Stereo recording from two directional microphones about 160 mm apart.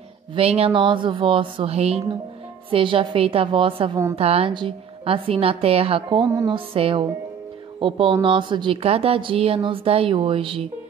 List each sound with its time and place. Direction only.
0.3 s speech: 40° right (ahead or behind)